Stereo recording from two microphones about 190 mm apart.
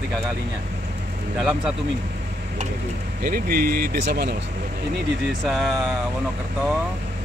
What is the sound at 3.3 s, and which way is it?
Speech, 50° right (ahead or behind).